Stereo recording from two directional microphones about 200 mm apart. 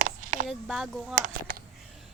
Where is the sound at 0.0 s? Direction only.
40° right (ahead or behind).